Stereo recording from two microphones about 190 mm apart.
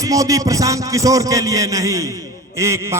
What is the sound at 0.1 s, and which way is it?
A man's voice, 15° right (ahead or behind).